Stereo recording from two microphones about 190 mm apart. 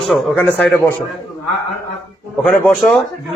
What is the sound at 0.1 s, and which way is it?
Speech, centre (ahead or behind).